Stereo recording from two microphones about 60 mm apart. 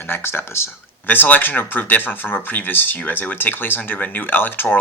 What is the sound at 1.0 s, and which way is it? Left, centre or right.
Speech, left.